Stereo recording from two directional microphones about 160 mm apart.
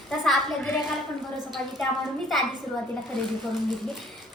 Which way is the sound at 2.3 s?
Centre (ahead or behind).